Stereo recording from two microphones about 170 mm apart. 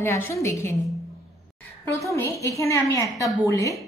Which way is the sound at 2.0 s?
15° left (ahead or behind).